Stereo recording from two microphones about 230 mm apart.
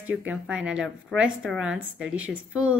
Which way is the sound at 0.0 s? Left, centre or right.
Centre.